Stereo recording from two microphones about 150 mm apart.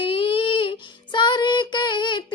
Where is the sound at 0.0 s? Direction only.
35° left (ahead or behind).